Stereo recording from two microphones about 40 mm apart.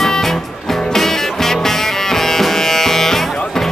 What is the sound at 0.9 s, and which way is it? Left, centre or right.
Music, centre.